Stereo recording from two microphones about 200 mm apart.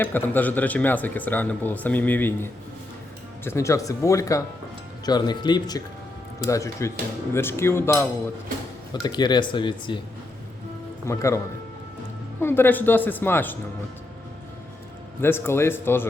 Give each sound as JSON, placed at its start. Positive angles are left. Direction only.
{"t": 0.0, "sound": "a man's voice", "side_deg": 10}
{"t": 11.0, "sound": "a man's voice", "side_deg": 15}
{"t": 12.4, "sound": "a man's voice", "side_deg": 10}
{"t": 15.2, "sound": "a man's voice", "side_deg": 10}